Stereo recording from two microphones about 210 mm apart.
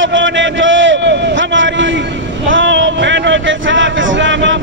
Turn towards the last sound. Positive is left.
turn(degrees=-60)  # may be behind; listen again after turning